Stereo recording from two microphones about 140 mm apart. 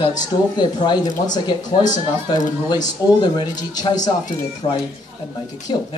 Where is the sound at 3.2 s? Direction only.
30° left (ahead or behind).